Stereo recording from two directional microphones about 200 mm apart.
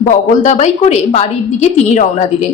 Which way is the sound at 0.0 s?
40° left (ahead or behind).